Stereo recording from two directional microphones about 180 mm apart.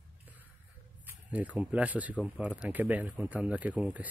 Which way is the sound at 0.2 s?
10° right (ahead or behind).